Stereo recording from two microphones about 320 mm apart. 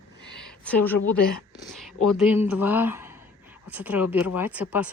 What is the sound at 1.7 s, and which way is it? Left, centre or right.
A woman's voice, centre.